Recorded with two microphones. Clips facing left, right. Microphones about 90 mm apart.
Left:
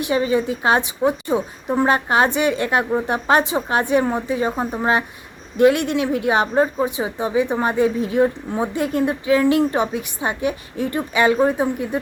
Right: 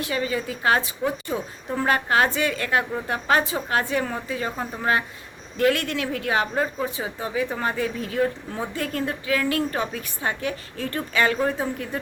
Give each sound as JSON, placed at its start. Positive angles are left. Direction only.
{"t": 0.0, "sound": "speech", "side_deg": 25}